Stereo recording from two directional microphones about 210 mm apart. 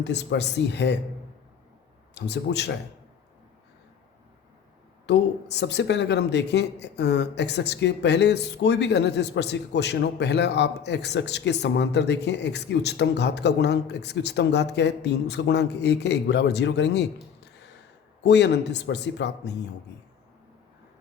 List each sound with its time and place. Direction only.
0.0 s speech: 55° left (ahead or behind)
2.1 s a man's voice: 55° left (ahead or behind)
5.0 s speech: 55° left (ahead or behind)
18.2 s speech: 55° left (ahead or behind)